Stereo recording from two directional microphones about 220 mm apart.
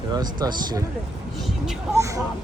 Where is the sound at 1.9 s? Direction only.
15° right (ahead or behind).